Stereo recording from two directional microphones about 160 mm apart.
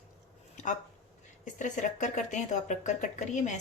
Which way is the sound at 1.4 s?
50° left (ahead or behind).